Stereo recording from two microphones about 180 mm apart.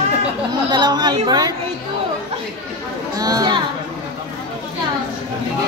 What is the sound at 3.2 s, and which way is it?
Speech, 20° right (ahead or behind).